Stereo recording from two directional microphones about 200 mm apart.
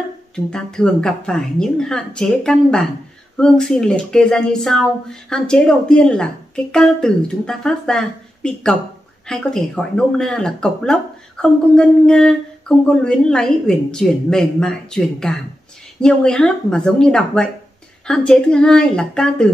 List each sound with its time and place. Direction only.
0.5 s speech: 5° left (ahead or behind)